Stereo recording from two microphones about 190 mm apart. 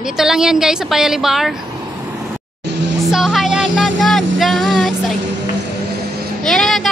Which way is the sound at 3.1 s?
Centre (ahead or behind).